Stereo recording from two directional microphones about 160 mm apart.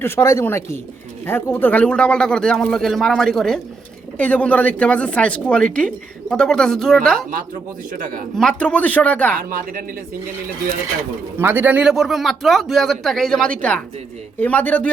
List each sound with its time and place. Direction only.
0.0 s speech: 15° left (ahead or behind)
7.9 s a woman's voice: 60° right (ahead or behind)
8.4 s speech: 5° left (ahead or behind)
9.3 s a woman's voice: 60° right (ahead or behind)
11.3 s speech: 10° right (ahead or behind); by 14.8 s 10° left (ahead or behind)